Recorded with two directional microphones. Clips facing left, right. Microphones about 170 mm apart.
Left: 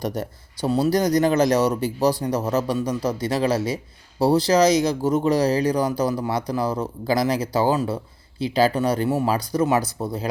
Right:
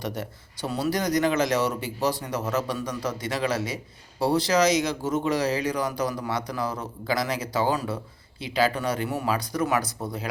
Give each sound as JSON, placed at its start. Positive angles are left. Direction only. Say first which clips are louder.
{"t": 0.0, "sound": "speech", "louder": "left 5 dB", "side_deg": 40}